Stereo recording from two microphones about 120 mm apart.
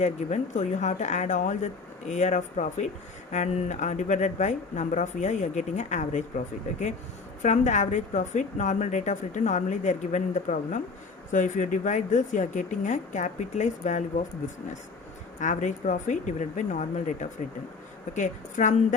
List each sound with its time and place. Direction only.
0.0 s speech: 80° left
15.4 s speech: 90° left